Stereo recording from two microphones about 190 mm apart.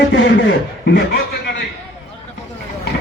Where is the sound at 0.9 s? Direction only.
60° left (ahead or behind).